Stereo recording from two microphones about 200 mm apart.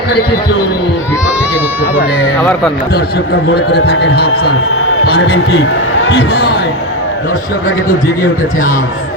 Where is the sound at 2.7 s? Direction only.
50° left (ahead or behind).